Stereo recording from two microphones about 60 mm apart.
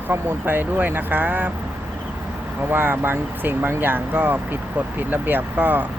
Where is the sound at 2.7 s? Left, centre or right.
Right.